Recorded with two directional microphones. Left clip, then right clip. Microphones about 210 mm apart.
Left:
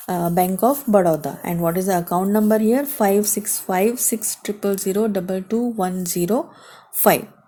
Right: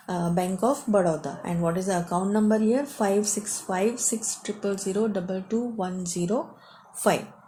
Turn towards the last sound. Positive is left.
turn(degrees=50)  # may be behind; listen again after turning